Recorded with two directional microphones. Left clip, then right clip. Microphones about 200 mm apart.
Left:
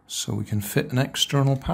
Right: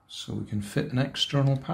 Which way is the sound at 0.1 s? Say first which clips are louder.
Left 6 dB; 50° left (ahead or behind).